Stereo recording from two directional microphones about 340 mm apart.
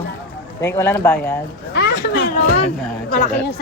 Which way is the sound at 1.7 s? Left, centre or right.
Left.